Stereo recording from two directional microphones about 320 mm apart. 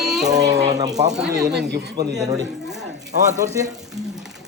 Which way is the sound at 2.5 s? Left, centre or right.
Centre.